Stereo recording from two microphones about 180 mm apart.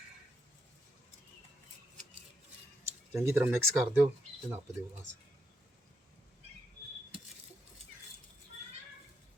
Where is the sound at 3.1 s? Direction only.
15° right (ahead or behind).